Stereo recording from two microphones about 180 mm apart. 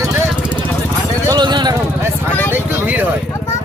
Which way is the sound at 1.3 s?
25° right (ahead or behind).